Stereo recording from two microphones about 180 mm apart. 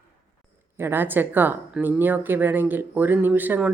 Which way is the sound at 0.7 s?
10° right (ahead or behind).